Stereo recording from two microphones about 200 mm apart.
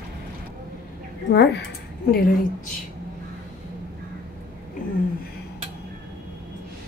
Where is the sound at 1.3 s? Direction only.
60° left (ahead or behind).